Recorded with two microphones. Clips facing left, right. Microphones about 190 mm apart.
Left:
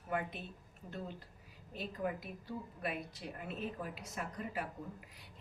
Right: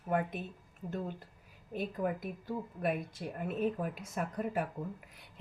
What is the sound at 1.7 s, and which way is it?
Speech, 50° right (ahead or behind).